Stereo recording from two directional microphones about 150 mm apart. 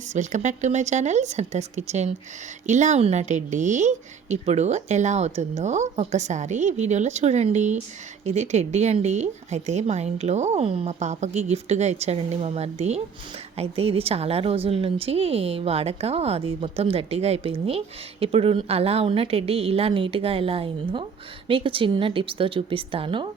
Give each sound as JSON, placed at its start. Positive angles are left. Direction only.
{"t": 0.1, "sound": "a woman's voice", "side_deg": -55}
{"t": 11.0, "sound": "a woman's voice", "side_deg": -50}